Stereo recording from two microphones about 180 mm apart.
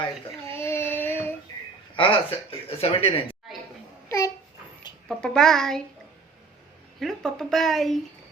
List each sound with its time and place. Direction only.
0.5 s child singing: 15° left (ahead or behind)
2.0 s speech: 30° left (ahead or behind)
5.0 s speech: 5° left (ahead or behind)
7.0 s speech: centre (ahead or behind)